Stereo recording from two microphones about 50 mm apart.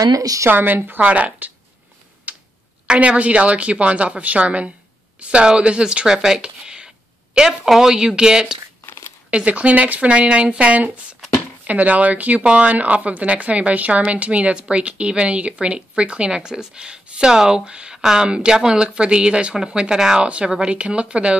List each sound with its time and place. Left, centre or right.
0.5 s speech: right
1.0 s a woman's voice: right
2.3 s tick-tock: right
2.9 s a woman's voice: right
9.3 s a woman's voice: right